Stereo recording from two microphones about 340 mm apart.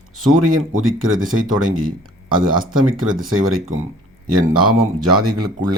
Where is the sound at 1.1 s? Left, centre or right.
Right.